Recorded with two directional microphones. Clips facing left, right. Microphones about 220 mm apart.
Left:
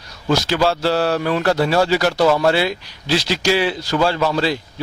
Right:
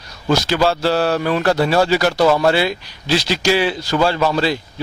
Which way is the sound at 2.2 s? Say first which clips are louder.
Right 1 dB; 35° right (ahead or behind).